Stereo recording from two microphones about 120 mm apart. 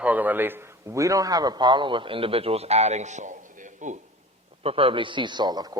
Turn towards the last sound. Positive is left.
turn(degrees=-35)  # may be behind; listen again after turning